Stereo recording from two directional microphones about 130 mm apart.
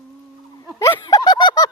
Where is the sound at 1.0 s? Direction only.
30° left (ahead or behind).